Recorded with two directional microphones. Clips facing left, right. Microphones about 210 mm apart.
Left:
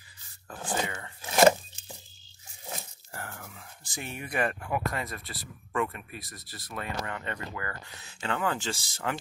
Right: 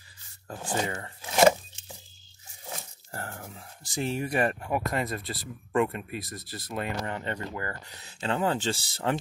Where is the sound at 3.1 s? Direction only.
35° right (ahead or behind).